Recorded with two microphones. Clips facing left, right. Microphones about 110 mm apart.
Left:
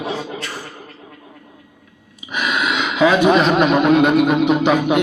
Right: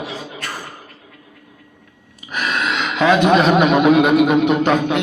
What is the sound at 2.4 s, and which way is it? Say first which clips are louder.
A man's voice: left 1 dB; 10° left (ahead or behind).